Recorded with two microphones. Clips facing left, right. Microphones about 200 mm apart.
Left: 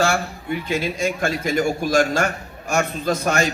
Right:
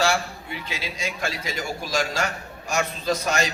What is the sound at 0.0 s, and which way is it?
A man's voice, 50° left (ahead or behind).